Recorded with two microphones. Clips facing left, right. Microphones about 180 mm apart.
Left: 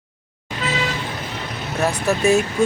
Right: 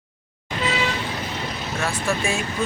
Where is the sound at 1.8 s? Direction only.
40° left (ahead or behind).